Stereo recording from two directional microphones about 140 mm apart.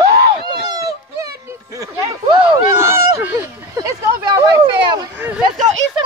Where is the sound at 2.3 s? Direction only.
35° right (ahead or behind).